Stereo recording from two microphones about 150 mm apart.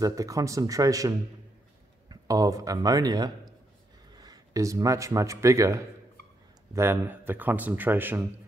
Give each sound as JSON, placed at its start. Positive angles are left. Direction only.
{"t": 0.0, "sound": "a man's voice", "side_deg": -20}